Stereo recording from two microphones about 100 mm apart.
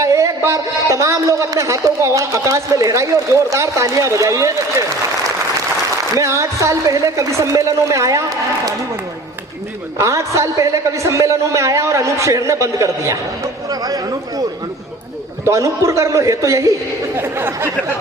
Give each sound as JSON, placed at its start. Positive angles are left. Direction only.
{"t": 0.0, "sound": "a man's voice", "side_deg": -30}
{"t": 6.1, "sound": "a woman's voice", "side_deg": -30}
{"t": 10.0, "sound": "a woman's voice", "side_deg": -30}
{"t": 15.4, "sound": "a woman's voice", "side_deg": -30}